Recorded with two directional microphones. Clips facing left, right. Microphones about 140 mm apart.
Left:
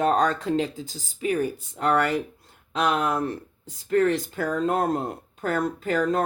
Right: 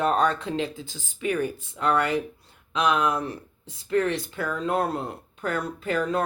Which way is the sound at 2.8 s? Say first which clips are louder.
Even; 50° left (ahead or behind).